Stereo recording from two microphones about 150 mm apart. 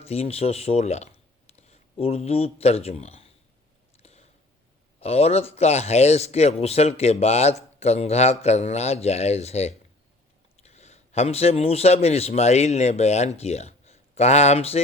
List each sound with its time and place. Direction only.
0.0 s speech: 40° left (ahead or behind)
4.0 s a sound: 45° left (ahead or behind)
4.9 s a man's voice: 45° left (ahead or behind)